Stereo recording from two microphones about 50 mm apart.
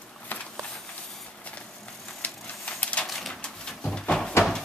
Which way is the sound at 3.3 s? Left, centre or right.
Left.